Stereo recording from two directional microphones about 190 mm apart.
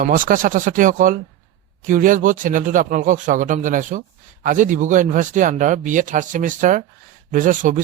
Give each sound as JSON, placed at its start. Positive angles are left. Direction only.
{"t": 0.0, "sound": "speech", "side_deg": -45}